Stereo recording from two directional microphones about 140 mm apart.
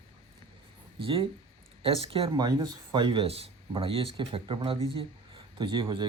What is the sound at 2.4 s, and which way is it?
Speech, 30° right (ahead or behind).